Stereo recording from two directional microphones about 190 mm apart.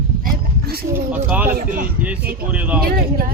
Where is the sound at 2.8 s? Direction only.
50° right (ahead or behind).